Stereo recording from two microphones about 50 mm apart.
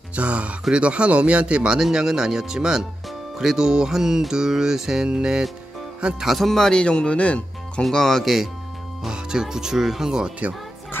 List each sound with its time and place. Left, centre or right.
0.1 s speech: right
1.8 s music: centre
6.2 s a man's voice: centre
6.7 s speech: centre
7.8 s speech: centre
9.1 s music: centre